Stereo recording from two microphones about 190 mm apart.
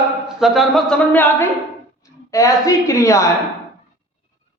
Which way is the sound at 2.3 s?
15° left (ahead or behind).